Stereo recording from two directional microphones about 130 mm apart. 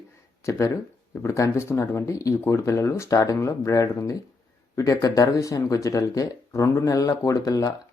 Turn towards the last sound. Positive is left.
turn(degrees=25)  # may be behind; listen again after turning